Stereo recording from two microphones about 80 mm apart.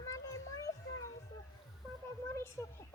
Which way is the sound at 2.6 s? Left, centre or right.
Left.